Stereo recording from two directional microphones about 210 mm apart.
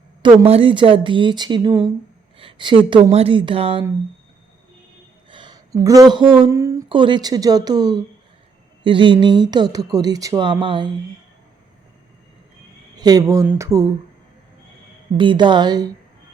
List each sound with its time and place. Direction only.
0.2 s speech: 25° right (ahead or behind)
5.3 s speech: 20° right (ahead or behind)
13.0 s speech: 20° right (ahead or behind)
15.2 s speech: 20° right (ahead or behind)